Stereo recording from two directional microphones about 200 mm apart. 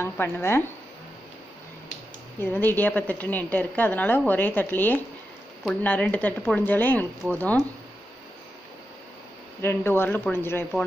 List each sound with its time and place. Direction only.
0.0 s a woman's voice: 10° left (ahead or behind)
2.4 s a woman's voice: 10° left (ahead or behind)
9.6 s a woman's voice: 10° left (ahead or behind)